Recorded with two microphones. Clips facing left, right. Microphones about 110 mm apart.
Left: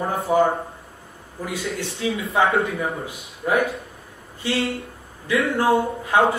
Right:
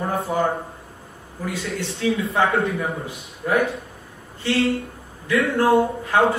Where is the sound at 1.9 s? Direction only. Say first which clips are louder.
Right 3 dB; centre (ahead or behind).